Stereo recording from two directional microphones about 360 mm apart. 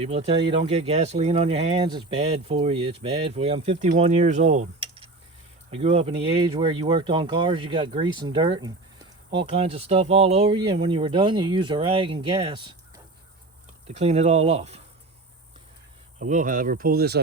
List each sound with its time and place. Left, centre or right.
0.0 s speech: centre
13.8 s speech: centre
16.2 s speech: right